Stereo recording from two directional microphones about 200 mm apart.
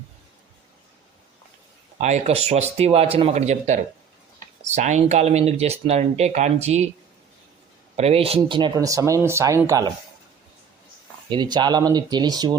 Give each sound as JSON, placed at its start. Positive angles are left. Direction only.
{"t": 2.0, "sound": "speech", "side_deg": -35}
{"t": 7.9, "sound": "speech", "side_deg": -30}
{"t": 11.3, "sound": "speech", "side_deg": -20}